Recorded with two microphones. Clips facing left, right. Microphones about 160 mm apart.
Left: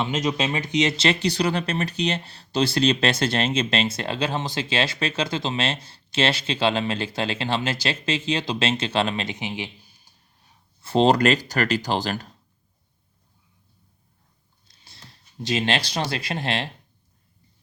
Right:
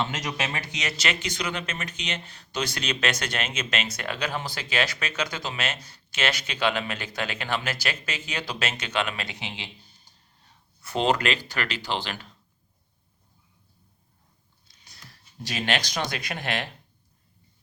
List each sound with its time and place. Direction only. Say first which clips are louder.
0.0 s speech: left 6 dB; 20° left (ahead or behind)
10.8 s speech: left 6 dB; 30° left (ahead or behind)
14.8 s speech: left 2 dB; 25° left (ahead or behind)